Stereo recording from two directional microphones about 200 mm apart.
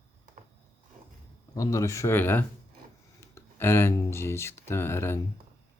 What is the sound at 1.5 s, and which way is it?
Speech, 15° left (ahead or behind).